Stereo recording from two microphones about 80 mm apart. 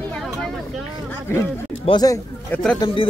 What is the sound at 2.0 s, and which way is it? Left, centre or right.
Speech, left.